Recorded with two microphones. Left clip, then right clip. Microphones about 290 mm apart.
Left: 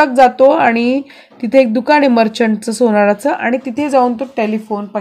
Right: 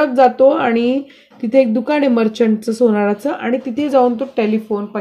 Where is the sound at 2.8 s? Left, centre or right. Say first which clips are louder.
Left 4 dB; left.